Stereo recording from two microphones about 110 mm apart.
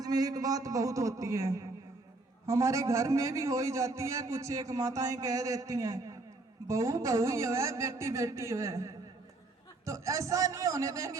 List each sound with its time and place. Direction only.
0.0 s a man's voice: 35° right (ahead or behind)